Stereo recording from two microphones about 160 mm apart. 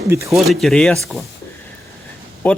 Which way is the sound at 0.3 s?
Centre (ahead or behind).